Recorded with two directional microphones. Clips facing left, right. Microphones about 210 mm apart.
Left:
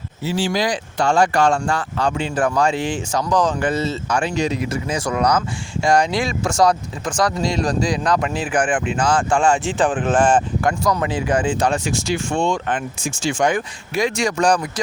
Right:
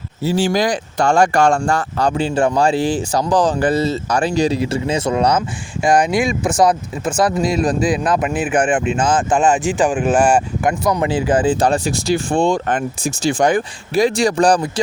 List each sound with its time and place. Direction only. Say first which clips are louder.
0.3 s speech: right 4 dB; 45° right (ahead or behind)